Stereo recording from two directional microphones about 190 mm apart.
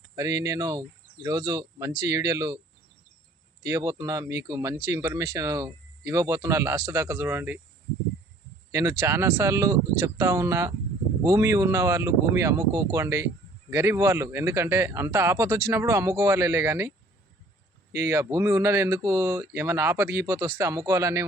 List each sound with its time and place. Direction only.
0.2 s speech: 20° right (ahead or behind)
3.6 s speech: 20° right (ahead or behind)
8.7 s speech: 15° right (ahead or behind)
17.9 s speech: 15° right (ahead or behind)